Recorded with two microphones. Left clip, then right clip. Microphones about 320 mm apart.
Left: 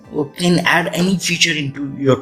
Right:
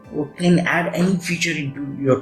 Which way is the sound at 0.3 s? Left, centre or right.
Left.